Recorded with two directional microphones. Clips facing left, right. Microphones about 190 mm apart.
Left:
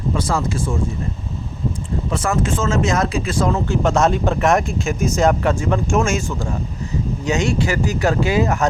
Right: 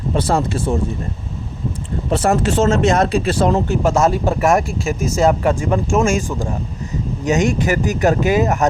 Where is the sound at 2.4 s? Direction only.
70° right (ahead or behind).